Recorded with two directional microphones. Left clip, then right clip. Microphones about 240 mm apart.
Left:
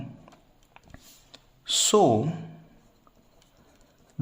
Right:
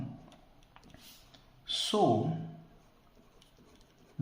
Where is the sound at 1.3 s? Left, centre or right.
Left.